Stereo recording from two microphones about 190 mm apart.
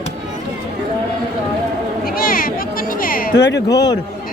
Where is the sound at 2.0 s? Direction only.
50° left (ahead or behind).